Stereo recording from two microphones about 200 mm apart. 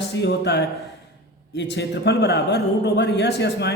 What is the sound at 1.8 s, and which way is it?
Speech, 55° left (ahead or behind).